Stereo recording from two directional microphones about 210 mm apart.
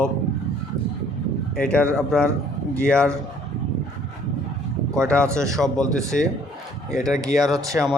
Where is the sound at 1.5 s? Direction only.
5° left (ahead or behind).